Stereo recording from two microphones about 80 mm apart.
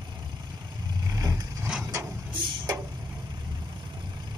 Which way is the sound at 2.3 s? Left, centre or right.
Right.